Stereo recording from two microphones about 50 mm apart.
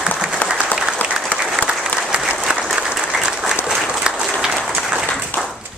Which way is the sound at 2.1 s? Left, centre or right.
Right.